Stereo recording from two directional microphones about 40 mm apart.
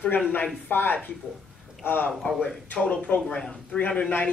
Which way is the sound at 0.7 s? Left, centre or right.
Left.